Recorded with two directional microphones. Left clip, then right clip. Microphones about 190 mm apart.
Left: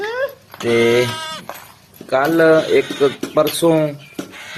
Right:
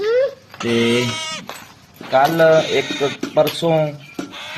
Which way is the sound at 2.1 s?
35° left (ahead or behind).